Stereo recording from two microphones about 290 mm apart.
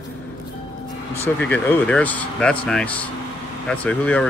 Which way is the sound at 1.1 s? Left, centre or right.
Centre.